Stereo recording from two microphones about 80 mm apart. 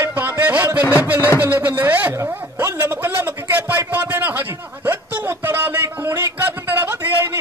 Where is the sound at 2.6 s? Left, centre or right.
Right.